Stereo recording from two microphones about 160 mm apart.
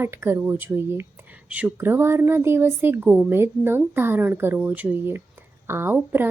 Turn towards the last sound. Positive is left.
turn(degrees=-15)  # may be behind; listen again after turning